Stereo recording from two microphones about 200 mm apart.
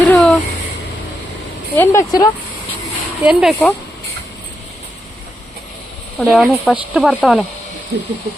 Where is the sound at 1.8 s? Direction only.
15° left (ahead or behind).